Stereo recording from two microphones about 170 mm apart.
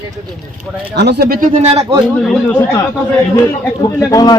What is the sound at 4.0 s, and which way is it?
Speech, 20° left (ahead or behind).